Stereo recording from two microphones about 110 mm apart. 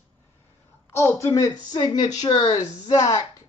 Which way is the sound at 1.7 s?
40° left (ahead or behind).